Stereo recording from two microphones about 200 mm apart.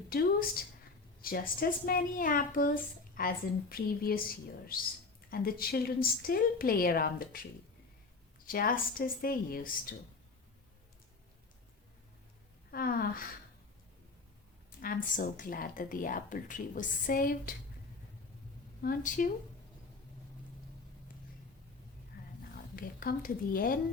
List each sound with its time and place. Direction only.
0.1 s a woman's voice: 50° left (ahead or behind)
8.4 s a woman's voice: 45° left (ahead or behind)
12.7 s a woman's voice: 45° left (ahead or behind)
14.8 s a woman's voice: 45° left (ahead or behind)
18.8 s a woman's voice: 45° left (ahead or behind)
22.7 s a woman's voice: 45° left (ahead or behind)